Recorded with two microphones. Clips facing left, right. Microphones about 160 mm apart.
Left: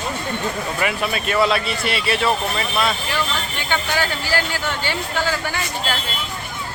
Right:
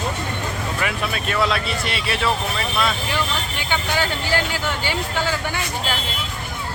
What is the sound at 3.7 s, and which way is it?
Speech, 15° right (ahead or behind).